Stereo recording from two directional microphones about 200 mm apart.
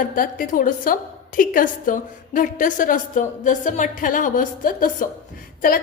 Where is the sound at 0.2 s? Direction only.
45° left (ahead or behind).